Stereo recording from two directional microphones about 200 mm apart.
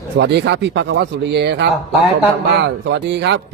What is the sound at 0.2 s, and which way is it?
Speech, 55° right (ahead or behind).